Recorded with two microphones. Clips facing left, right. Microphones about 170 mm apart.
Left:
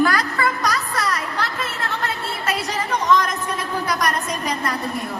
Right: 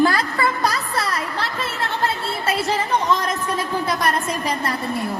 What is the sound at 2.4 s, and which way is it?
Speech, 30° right (ahead or behind).